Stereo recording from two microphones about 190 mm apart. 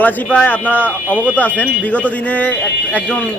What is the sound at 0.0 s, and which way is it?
Speech, 10° left (ahead or behind).